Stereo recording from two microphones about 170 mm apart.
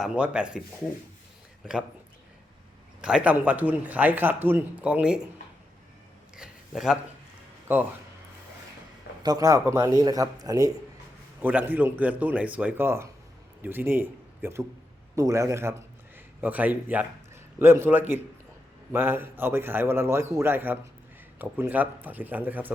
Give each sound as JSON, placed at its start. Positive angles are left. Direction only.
{"t": 0.0, "sound": "speech", "side_deg": -5}
{"t": 1.6, "sound": "speech", "side_deg": -5}
{"t": 3.0, "sound": "speech", "side_deg": -5}
{"t": 6.3, "sound": "a sound", "side_deg": -5}
{"t": 7.7, "sound": "speech", "side_deg": -10}
{"t": 9.2, "sound": "speech", "side_deg": -20}
{"t": 11.4, "sound": "a man's voice", "side_deg": -10}